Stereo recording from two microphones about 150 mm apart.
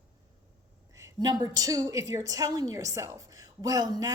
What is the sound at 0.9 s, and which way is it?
A woman's voice, 25° right (ahead or behind).